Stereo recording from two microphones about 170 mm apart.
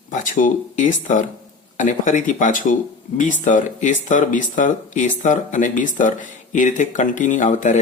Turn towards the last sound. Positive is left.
turn(degrees=45)  # may be behind; listen again after turning